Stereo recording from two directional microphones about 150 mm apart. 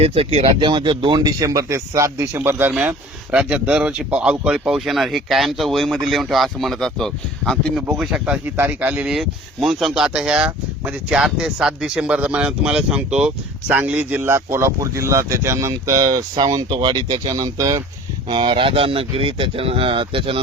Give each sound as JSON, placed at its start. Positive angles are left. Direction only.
{"t": 0.0, "sound": "speech", "side_deg": -40}